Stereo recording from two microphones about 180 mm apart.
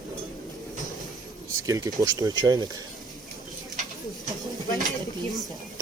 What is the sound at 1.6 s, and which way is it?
Speech, 15° right (ahead or behind).